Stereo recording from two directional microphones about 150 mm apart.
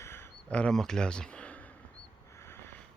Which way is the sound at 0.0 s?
15° left (ahead or behind).